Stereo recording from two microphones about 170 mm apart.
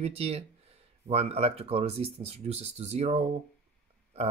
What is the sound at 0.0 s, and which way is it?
Speech, 35° right (ahead or behind).